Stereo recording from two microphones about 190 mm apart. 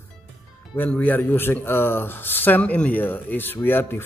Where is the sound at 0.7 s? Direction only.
10° left (ahead or behind).